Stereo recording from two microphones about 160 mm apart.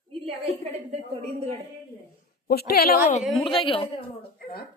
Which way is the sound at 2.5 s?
75° left (ahead or behind).